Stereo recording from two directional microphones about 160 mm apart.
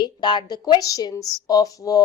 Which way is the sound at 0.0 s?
25° left (ahead or behind).